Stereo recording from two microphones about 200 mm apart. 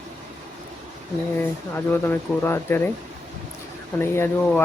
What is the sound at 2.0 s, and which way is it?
Speech, 10° left (ahead or behind).